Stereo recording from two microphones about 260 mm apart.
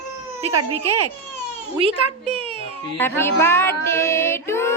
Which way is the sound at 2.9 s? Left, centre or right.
Centre.